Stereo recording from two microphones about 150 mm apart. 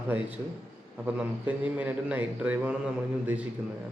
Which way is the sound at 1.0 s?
10° right (ahead or behind).